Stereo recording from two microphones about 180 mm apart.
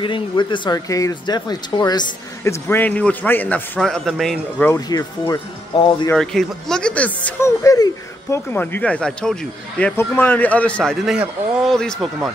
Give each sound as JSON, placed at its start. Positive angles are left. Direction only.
{"t": 0.0, "sound": "speech", "side_deg": 25}
{"t": 4.6, "sound": "speech", "side_deg": 20}
{"t": 6.1, "sound": "speech", "side_deg": 5}